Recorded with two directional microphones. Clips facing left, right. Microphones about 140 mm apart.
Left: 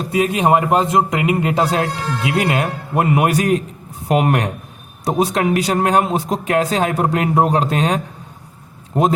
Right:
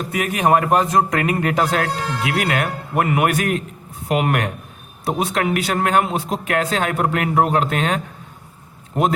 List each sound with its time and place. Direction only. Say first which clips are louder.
0.0 s speech: left 3 dB; 25° left (ahead or behind)